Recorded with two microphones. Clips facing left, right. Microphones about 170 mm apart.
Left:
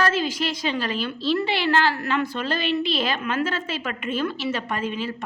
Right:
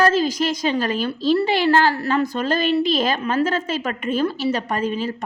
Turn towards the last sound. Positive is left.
turn(degrees=-40)  # may be behind; listen again after turning